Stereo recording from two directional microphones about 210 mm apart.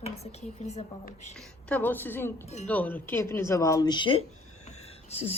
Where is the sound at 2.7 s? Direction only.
10° left (ahead or behind); by 4.2 s 25° left (ahead or behind).